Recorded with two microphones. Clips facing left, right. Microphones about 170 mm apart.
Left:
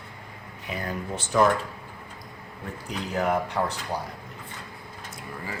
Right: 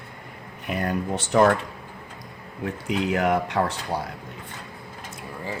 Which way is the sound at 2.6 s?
80° right.